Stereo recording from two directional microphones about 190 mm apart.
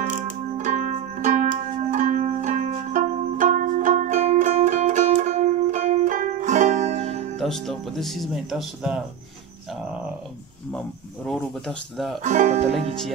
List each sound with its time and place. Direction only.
0.6 s music: 40° right (ahead or behind)
7.3 s speech: centre (ahead or behind)
10.7 s speech: centre (ahead or behind)
12.2 s speech: 40° right (ahead or behind)